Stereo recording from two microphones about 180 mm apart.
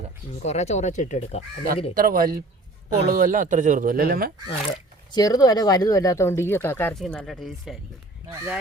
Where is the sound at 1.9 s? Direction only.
50° right (ahead or behind).